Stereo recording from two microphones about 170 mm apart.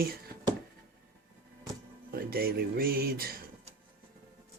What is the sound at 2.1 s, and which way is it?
Speech, 65° right (ahead or behind).